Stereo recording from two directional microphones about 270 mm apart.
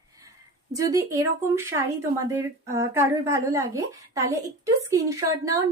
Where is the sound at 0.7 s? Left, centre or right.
Centre.